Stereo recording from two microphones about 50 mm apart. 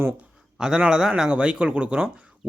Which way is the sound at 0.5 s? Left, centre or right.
Centre.